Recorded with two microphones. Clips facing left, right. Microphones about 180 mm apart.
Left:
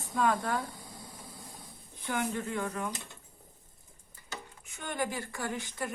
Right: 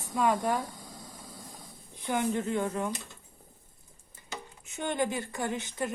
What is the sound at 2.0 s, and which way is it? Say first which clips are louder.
Speech: right 4 dB; 25° right (ahead or behind).